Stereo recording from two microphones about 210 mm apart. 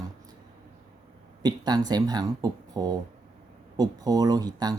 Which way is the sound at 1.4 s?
20° right (ahead or behind).